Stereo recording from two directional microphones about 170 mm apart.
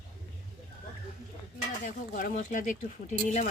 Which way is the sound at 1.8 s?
50° left (ahead or behind).